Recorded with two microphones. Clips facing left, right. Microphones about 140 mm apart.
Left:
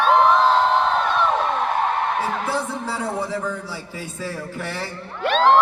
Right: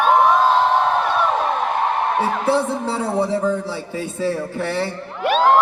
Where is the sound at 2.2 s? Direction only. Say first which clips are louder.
Right 5 dB; 30° right (ahead or behind).